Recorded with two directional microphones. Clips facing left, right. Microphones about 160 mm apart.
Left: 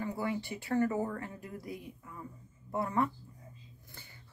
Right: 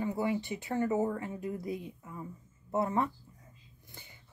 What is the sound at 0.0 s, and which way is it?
Speech, 20° right (ahead or behind).